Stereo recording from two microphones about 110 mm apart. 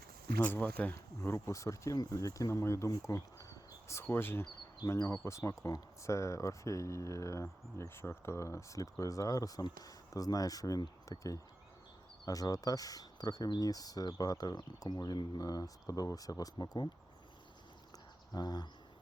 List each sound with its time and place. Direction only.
0.4 s speech: 15° left (ahead or behind)
0.9 s speech: 25° left (ahead or behind)
3.1 s a sound: 30° left (ahead or behind)
4.0 s speech: 20° left (ahead or behind); by 16.9 s 40° left (ahead or behind)
18.3 s speech: 40° left (ahead or behind)